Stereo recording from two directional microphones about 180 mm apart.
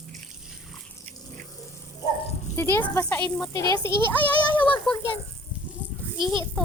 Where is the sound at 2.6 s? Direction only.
10° left (ahead or behind).